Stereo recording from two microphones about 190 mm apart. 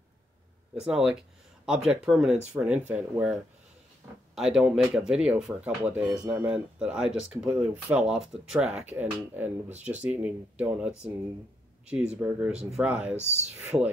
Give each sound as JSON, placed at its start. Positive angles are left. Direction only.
{"t": 0.7, "sound": "speech", "side_deg": -5}
{"t": 4.4, "sound": "speech", "side_deg": -5}
{"t": 12.2, "sound": "speech", "side_deg": -10}
{"t": 13.1, "sound": "speech", "side_deg": -35}
{"t": 13.6, "sound": "speech", "side_deg": -10}